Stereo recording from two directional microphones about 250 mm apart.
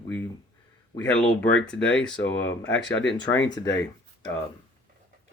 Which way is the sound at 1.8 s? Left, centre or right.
Left.